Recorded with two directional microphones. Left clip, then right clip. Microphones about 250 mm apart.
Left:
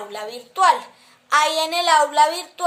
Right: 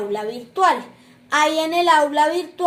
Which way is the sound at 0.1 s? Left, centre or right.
Left.